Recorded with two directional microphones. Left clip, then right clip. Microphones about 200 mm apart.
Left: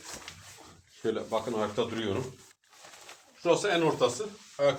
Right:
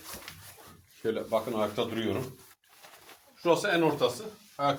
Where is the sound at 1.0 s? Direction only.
15° left (ahead or behind).